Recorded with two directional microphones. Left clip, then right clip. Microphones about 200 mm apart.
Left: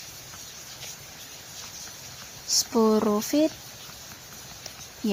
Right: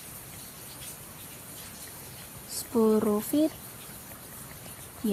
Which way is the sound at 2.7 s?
25° left (ahead or behind).